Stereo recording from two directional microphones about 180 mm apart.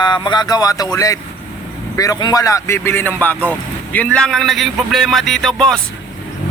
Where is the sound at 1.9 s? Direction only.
20° left (ahead or behind).